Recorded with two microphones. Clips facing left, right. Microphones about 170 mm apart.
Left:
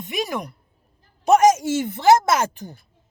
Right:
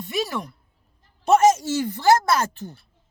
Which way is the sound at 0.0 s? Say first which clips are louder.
Even; 15° left (ahead or behind).